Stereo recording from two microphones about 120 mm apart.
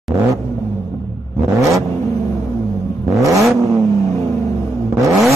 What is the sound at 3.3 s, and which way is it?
Vehicle, centre (ahead or behind).